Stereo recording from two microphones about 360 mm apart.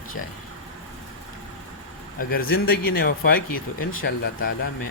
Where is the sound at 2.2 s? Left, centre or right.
Left.